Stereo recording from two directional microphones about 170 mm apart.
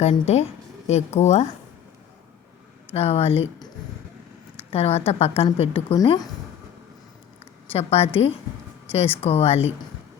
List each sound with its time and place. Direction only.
0.0 s a woman's voice: 40° left (ahead or behind)
2.9 s a woman's voice: 35° left (ahead or behind)
4.7 s a woman's voice: 35° left (ahead or behind)
7.7 s a woman's voice: 35° left (ahead or behind)